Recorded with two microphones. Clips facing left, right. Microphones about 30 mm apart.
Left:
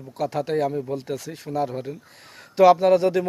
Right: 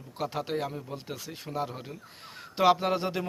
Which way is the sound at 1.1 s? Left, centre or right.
Centre.